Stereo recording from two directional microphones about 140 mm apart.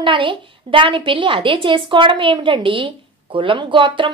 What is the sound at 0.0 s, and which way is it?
A woman's voice, 35° right (ahead or behind).